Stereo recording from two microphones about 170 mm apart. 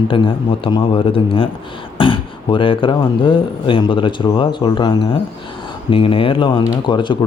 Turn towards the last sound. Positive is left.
turn(degrees=30)  # may be behind; listen again after turning